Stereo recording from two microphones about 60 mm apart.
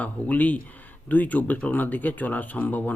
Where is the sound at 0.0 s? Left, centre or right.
Left.